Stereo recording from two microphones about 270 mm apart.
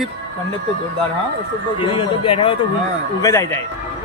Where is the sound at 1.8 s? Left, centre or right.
Centre.